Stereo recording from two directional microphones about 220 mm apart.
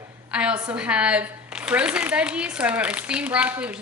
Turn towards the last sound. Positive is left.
turn(degrees=-5)  # may be behind; listen again after turning